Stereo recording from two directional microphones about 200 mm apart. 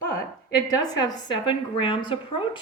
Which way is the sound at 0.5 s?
20° left (ahead or behind).